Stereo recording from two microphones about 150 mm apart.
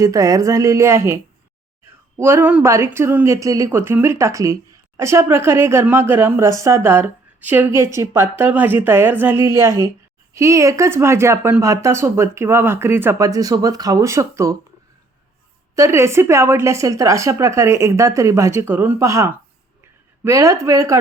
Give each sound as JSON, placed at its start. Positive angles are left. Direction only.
{"t": 0.0, "sound": "speech", "side_deg": -20}
{"t": 15.7, "sound": "speech", "side_deg": -20}